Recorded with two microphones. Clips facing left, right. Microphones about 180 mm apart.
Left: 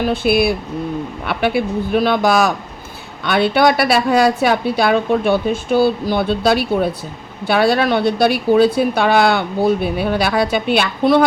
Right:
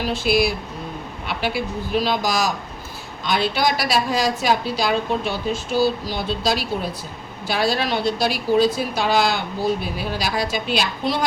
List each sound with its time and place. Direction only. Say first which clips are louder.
0.0 s a woman's voice: left 5 dB; 60° left (ahead or behind)